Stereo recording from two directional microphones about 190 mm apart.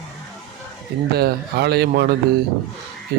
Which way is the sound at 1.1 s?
55° right (ahead or behind).